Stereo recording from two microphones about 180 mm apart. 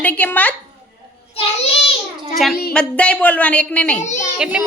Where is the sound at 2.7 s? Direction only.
5° left (ahead or behind).